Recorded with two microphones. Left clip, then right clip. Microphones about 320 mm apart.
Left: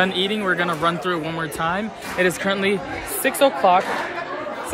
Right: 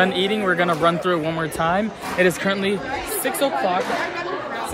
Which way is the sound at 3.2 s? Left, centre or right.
Left.